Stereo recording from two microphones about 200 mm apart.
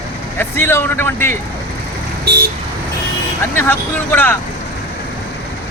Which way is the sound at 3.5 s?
10° left (ahead or behind).